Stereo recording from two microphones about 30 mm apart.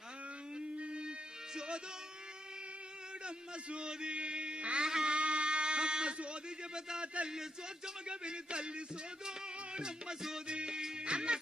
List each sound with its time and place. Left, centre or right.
0.6 s a sound: right
1.5 s a man's voice: right
3.2 s a man's voice: right
4.8 s music: right
5.1 s a sound: right
7.0 s a man's voice: right
9.7 s music: right